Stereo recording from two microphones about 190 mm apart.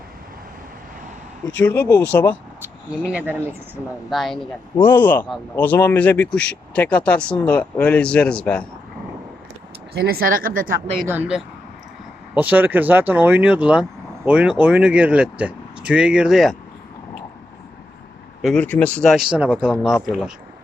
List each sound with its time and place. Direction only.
2.0 s speech: 10° left (ahead or behind)
3.1 s speech: 10° right (ahead or behind)
9.9 s speech: 55° right (ahead or behind)
11.1 s speech: 5° right (ahead or behind)
18.4 s speech: 5° left (ahead or behind)